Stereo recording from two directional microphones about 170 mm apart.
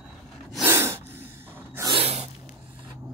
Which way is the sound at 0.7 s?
15° right (ahead or behind).